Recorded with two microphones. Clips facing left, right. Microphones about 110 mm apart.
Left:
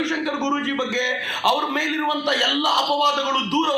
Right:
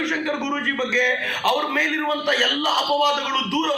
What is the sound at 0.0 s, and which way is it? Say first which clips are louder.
A man's voice: left 1 dB; 25° left (ahead or behind).